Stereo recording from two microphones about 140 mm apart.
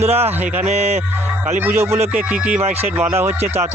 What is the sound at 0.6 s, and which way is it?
Music, 50° right (ahead or behind).